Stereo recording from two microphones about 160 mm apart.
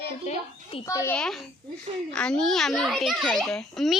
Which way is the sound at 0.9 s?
20° left (ahead or behind).